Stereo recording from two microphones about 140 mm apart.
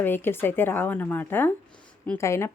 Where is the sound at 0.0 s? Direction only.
15° left (ahead or behind).